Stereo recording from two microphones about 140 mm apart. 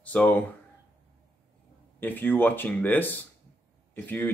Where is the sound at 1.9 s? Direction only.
15° left (ahead or behind).